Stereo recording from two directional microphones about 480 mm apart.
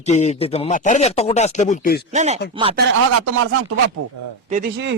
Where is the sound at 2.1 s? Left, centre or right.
Centre.